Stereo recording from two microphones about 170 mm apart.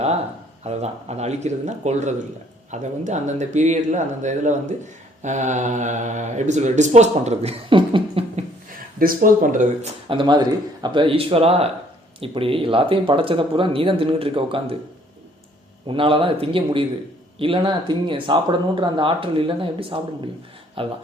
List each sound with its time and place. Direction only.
0.6 s speech: 40° right (ahead or behind)
8.4 s a sound: 55° right (ahead or behind)
10.1 s speech: 25° right (ahead or behind)
15.9 s speech: 30° right (ahead or behind)